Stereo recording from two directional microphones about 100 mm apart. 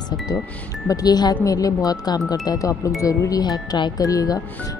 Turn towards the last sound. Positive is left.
turn(degrees=35)  # may be behind; listen again after turning